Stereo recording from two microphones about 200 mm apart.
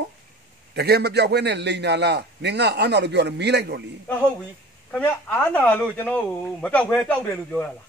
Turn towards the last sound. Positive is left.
turn(degrees=5)  # may be behind; listen again after turning